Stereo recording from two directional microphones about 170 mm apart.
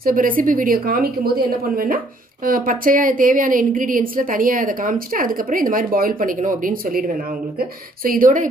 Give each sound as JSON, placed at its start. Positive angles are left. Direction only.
{"t": 0.0, "sound": "a woman's voice", "side_deg": -55}